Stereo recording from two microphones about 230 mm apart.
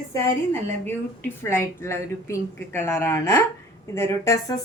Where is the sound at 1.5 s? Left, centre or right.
Centre.